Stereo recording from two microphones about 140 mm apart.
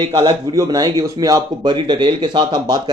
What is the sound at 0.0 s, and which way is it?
A man's voice, 25° right (ahead or behind).